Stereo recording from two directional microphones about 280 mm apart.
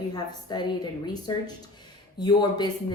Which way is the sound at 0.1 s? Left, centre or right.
Centre.